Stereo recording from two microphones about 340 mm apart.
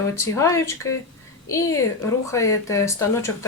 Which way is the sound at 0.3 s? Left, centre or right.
Centre.